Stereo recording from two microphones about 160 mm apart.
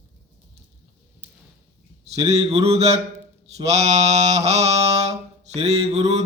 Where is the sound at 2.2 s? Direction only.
40° right (ahead or behind).